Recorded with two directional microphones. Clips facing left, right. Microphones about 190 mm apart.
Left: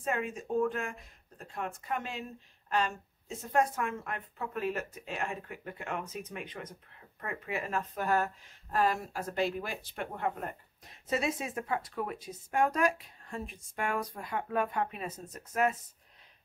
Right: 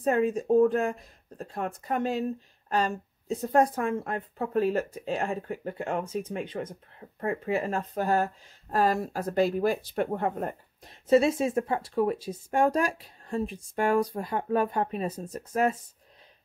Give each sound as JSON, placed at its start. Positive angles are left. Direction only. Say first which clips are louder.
{"t": 0.0, "sound": "speech", "louder": "right 9 dB", "side_deg": -35}